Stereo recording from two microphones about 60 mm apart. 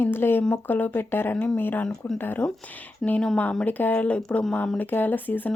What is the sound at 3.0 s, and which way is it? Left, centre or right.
Speech, centre.